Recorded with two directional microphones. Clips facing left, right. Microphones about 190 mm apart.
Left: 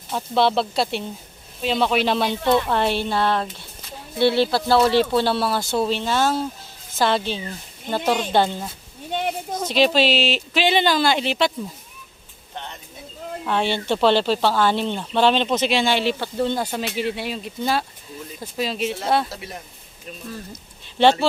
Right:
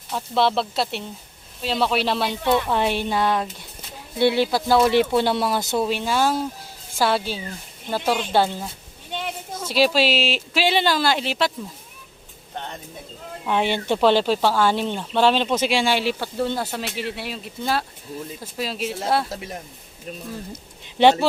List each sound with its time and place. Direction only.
0.1 s a woman's voice: centre (ahead or behind); by 5.6 s 15° right (ahead or behind)
5.7 s a woman's voice: 5° right (ahead or behind)
9.1 s a sound: 40° left (ahead or behind)
9.6 s speech: 5° right (ahead or behind)
13.4 s a woman's voice: 15° right (ahead or behind)
20.8 s a sound: 15° right (ahead or behind)